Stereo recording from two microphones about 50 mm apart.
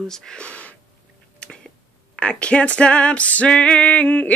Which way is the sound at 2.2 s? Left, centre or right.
Left.